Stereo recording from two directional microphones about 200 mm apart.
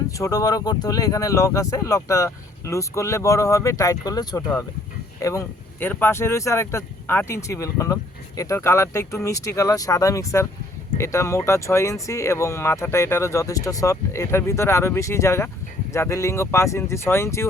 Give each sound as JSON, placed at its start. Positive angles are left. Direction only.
{"t": 0.1, "sound": "speech", "side_deg": 15}